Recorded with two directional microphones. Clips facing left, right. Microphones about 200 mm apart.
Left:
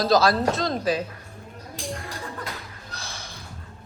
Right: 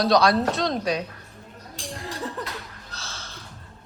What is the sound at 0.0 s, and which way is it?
Speech, centre (ahead or behind).